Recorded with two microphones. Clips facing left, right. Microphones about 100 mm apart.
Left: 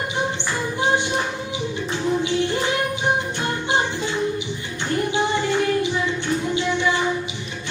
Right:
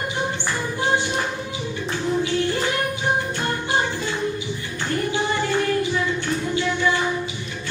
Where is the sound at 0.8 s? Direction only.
20° left (ahead or behind).